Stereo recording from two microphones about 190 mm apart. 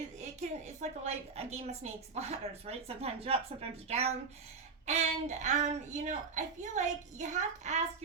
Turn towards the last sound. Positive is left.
turn(degrees=-35)  # may be behind; listen again after turning